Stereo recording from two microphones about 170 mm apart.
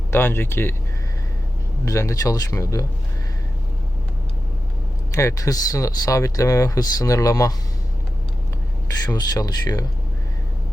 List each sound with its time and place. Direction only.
0.1 s speech: 15° left (ahead or behind)
1.8 s speech: 15° left (ahead or behind)
5.1 s speech: 20° left (ahead or behind)
9.0 s speech: 20° left (ahead or behind)